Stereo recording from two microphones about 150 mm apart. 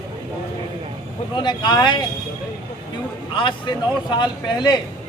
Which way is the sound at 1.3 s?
30° left (ahead or behind).